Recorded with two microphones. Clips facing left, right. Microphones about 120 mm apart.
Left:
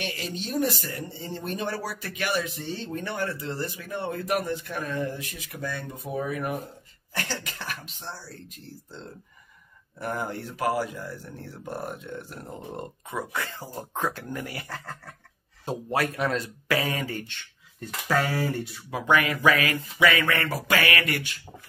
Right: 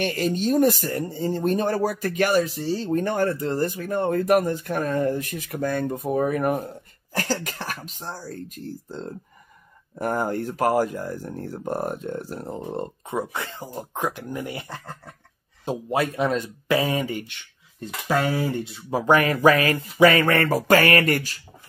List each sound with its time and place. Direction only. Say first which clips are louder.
0.0 s speech: right 10 dB; 50° right (ahead or behind)